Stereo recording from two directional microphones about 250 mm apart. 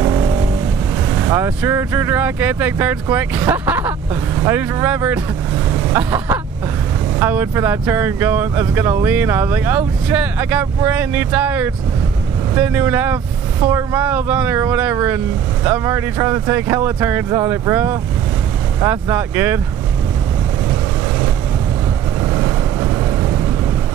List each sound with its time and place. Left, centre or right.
0.0 s vehicle: right
1.2 s speech: centre